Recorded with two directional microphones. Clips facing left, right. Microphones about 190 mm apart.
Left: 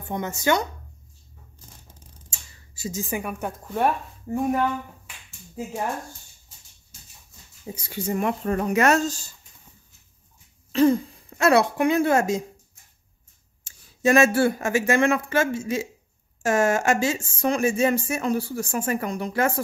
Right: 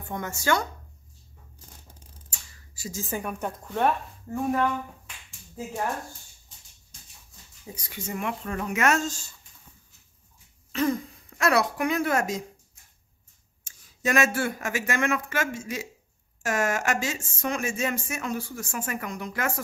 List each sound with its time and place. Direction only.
0.1 s speech: 20° left (ahead or behind)
2.2 s speech: 25° left (ahead or behind)
6.9 s a sound: 5° left (ahead or behind)
7.6 s speech: 30° left (ahead or behind)
10.7 s speech: 30° left (ahead or behind)
13.7 s speech: 30° left (ahead or behind)